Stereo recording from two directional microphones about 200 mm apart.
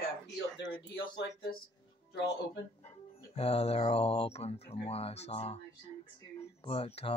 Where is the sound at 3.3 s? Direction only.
30° left (ahead or behind).